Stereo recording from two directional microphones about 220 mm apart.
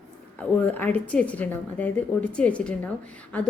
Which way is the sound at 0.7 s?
10° left (ahead or behind).